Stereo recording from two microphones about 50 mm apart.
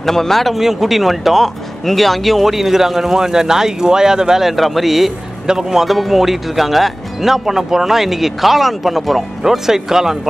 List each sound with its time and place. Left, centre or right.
0.0 s speech: centre